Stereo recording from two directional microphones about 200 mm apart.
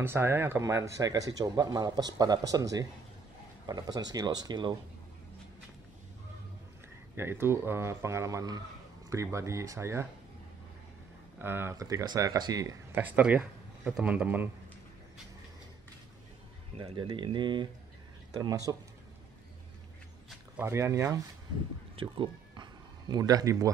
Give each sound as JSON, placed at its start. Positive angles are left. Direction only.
{"t": 0.0, "sound": "speech", "side_deg": -10}
{"t": 7.2, "sound": "speech", "side_deg": -10}
{"t": 11.3, "sound": "speech", "side_deg": -10}
{"t": 12.9, "sound": "speech", "side_deg": -10}
{"t": 16.9, "sound": "speech", "side_deg": -25}
{"t": 20.2, "sound": "speech", "side_deg": -10}
{"t": 21.9, "sound": "a sound", "side_deg": -25}